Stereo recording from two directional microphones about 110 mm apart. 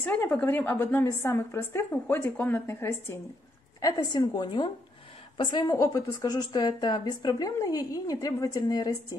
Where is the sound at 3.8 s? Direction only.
40° left (ahead or behind).